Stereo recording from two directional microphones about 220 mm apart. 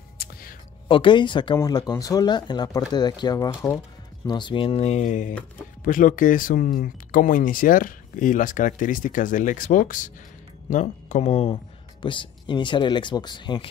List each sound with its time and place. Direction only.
0.2 s music: 40° left (ahead or behind)
0.8 s speech: 25° left (ahead or behind)